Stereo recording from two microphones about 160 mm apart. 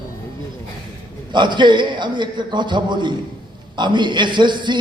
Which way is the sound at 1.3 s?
30° right (ahead or behind).